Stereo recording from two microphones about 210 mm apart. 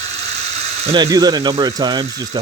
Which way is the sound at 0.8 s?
20° right (ahead or behind).